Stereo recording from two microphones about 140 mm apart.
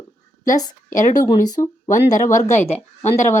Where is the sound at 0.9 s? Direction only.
65° left (ahead or behind).